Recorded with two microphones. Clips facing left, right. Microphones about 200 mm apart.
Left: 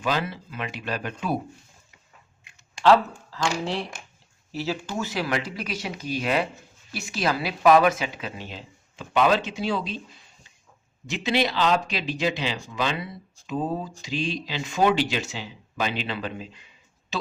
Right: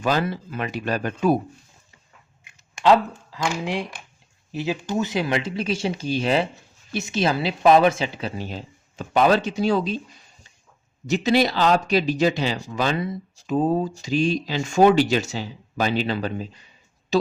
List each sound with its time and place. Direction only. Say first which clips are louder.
0.0 s speech: right 4 dB; 40° right (ahead or behind)
2.4 s a sound: right 1 dB; 15° right (ahead or behind)
4.5 s speech: right 4 dB; 15° right (ahead or behind); by 10.0 s 45° right (ahead or behind)
11.0 s speech: right 5 dB; 40° right (ahead or behind)